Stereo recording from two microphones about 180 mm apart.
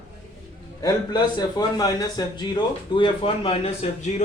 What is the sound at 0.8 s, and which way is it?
Speech, 20° left (ahead or behind).